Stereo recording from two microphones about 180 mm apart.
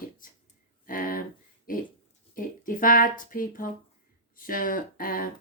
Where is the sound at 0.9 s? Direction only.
50° left (ahead or behind).